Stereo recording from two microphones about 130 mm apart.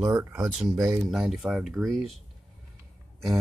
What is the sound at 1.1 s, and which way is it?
Speech, centre (ahead or behind).